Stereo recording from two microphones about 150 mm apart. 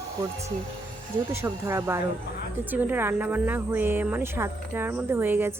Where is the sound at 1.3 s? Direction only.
15° right (ahead or behind).